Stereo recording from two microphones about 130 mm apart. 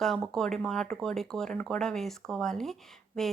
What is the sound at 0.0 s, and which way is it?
Speech, centre (ahead or behind).